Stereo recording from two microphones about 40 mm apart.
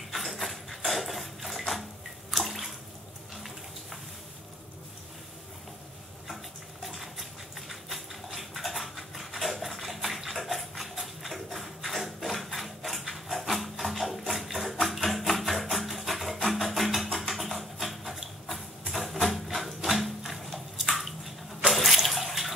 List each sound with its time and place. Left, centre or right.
0.1 s a sound: centre
2.3 s bathtub: centre
6.2 s patter: centre
11.0 s a sound: centre
16.4 s music: centre
21.5 s water: centre